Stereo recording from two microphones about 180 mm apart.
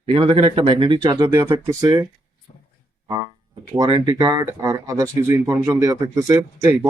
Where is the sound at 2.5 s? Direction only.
40° left (ahead or behind).